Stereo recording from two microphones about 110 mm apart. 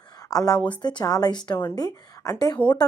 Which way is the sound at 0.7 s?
40° left (ahead or behind).